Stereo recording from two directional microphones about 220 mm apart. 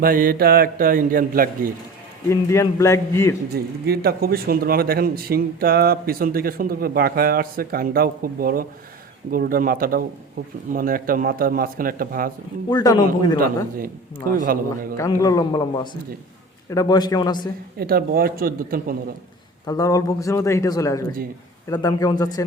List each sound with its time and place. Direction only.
0.0 s speech: 40° right (ahead or behind)
2.3 s speech: 15° left (ahead or behind)
3.5 s speech: 45° right (ahead or behind)
12.7 s speech: 15° left (ahead or behind)
14.4 s speech: 40° right (ahead or behind)
14.9 s speech: 15° left (ahead or behind)
17.7 s speech: 45° right (ahead or behind)
19.6 s speech: 15° left (ahead or behind)